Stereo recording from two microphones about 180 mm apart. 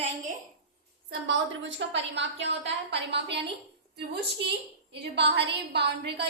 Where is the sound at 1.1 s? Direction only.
85° right.